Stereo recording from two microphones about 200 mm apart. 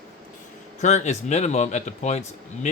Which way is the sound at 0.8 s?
35° left (ahead or behind).